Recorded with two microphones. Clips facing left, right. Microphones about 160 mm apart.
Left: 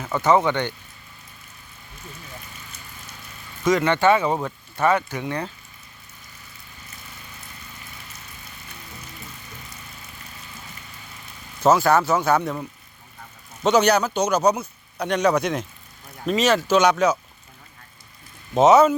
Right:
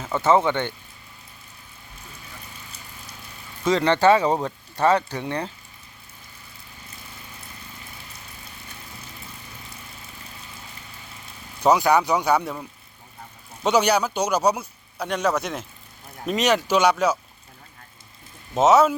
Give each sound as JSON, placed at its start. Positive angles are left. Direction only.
{"t": 0.0, "sound": "speech", "side_deg": -20}
{"t": 3.7, "sound": "speech", "side_deg": -35}
{"t": 11.6, "sound": "speech", "side_deg": -15}
{"t": 13.7, "sound": "speech", "side_deg": -10}
{"t": 16.6, "sound": "speech", "side_deg": -10}
{"t": 18.5, "sound": "speech", "side_deg": 0}